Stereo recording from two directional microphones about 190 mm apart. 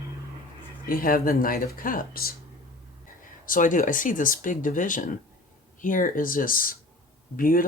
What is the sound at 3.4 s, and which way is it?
Speech, 45° left (ahead or behind).